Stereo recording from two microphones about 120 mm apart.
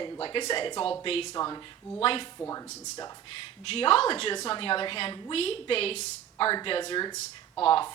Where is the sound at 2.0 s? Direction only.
50° left (ahead or behind).